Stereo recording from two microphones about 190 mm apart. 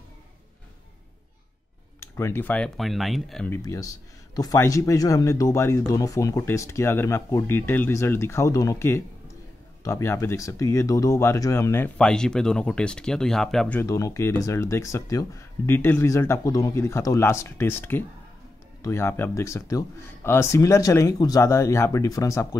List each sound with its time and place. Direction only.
2.0 s speech: 10° left (ahead or behind)
3.5 s speech: 15° left (ahead or behind)